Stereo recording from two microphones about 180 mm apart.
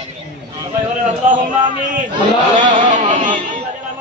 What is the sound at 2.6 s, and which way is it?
Speech, 45° right (ahead or behind).